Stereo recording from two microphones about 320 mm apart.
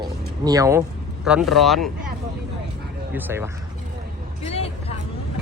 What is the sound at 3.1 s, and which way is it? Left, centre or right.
Speech, centre.